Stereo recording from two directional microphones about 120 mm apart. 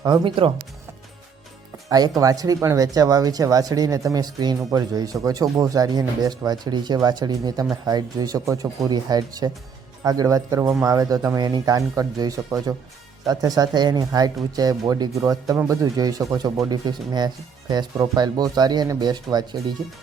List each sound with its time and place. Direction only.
0.0 s speech: 30° right (ahead or behind)
1.9 s speech: 30° right (ahead or behind)